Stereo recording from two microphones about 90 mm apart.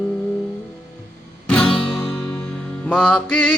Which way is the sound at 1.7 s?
90° left.